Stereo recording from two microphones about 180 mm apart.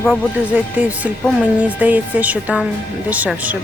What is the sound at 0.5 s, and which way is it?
Speech, 10° right (ahead or behind).